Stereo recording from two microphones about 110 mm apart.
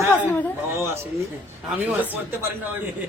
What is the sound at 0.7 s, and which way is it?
Speech, 25° right (ahead or behind).